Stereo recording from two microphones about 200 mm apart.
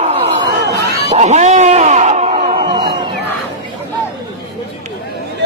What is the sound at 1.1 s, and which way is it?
Music, 35° right (ahead or behind).